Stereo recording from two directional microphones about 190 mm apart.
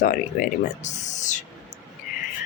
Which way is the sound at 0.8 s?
40° left (ahead or behind).